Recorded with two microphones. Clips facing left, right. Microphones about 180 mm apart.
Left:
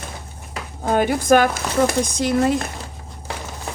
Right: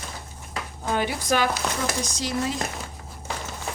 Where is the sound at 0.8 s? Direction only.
50° left (ahead or behind).